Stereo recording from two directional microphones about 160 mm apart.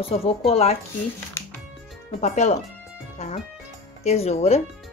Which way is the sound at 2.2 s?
45° left (ahead or behind).